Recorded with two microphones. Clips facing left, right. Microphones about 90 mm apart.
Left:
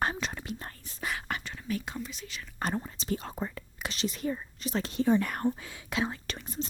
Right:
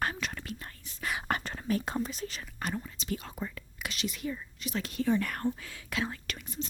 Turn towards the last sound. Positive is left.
turn(degrees=35)  # may be behind; listen again after turning